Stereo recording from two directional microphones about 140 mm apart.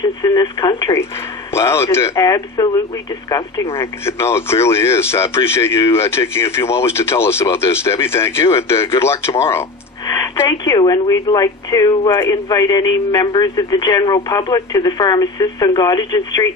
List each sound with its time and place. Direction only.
0.2 s speech: 30° left (ahead or behind)
1.5 s speech: 20° left (ahead or behind)